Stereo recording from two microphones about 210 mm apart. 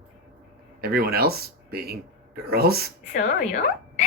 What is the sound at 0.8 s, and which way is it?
Speech, 45° right (ahead or behind).